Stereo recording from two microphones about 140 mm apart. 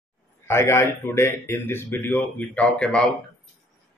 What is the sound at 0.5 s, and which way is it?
Speech, 20° left (ahead or behind).